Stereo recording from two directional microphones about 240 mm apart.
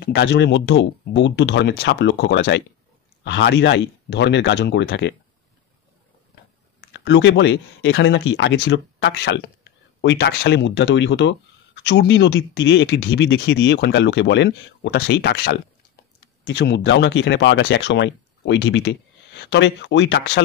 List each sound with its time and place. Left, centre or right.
0.0 s speech: left
6.8 s speech: left